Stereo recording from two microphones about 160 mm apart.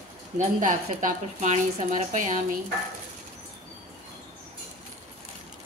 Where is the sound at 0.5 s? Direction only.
50° right (ahead or behind).